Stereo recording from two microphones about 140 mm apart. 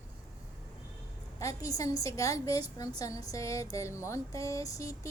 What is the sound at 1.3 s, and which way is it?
Speech, 25° left (ahead or behind).